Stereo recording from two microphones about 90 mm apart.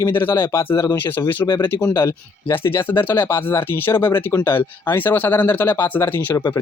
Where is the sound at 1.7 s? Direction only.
55° left (ahead or behind).